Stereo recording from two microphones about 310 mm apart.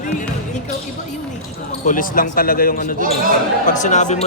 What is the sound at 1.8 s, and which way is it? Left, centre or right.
Speech, left.